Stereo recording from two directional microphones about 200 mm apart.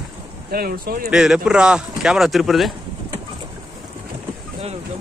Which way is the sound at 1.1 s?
5° right (ahead or behind).